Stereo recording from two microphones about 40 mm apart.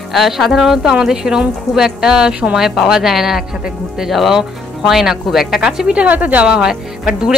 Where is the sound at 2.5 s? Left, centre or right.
Centre.